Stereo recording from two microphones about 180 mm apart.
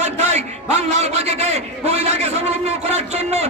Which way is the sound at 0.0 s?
40° right (ahead or behind).